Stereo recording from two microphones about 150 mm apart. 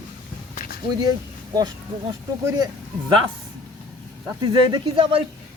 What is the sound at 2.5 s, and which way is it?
Speech, 25° right (ahead or behind).